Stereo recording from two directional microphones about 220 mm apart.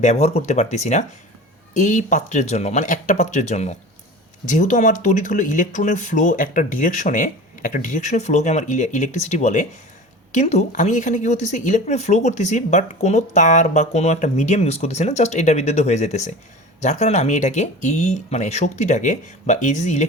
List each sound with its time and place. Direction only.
0.0 s speech: 30° left (ahead or behind)